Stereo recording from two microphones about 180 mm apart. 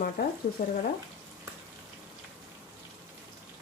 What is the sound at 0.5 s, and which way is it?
Speech, 45° left (ahead or behind).